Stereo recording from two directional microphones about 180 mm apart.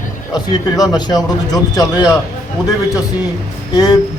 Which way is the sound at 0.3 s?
25° left (ahead or behind).